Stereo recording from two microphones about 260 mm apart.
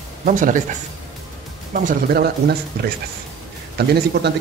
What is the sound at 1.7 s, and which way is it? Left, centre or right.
A man's voice, right.